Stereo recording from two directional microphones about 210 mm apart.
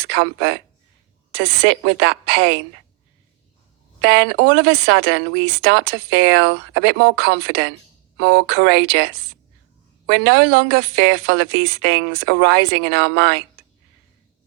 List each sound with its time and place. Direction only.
0.1 s speech: 60° right (ahead or behind)
4.0 s speech: 55° right (ahead or behind)
10.1 s speech: 60° right (ahead or behind)